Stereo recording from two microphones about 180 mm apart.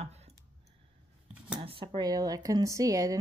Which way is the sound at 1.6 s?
30° right (ahead or behind).